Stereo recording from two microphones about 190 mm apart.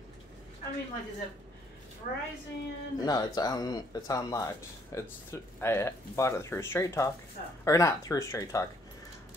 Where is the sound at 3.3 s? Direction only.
20° left (ahead or behind).